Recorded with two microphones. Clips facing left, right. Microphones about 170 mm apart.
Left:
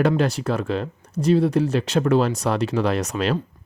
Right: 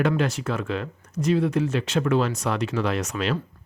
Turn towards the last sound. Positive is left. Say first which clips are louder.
# left 4 dB
turn(degrees=35)  # may be behind; listen again after turning